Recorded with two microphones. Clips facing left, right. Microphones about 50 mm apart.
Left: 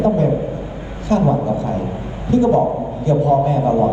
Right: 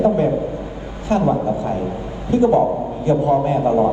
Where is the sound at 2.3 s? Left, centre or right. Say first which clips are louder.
Even; right.